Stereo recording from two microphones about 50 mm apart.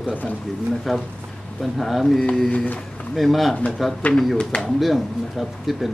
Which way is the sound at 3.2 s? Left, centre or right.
Centre.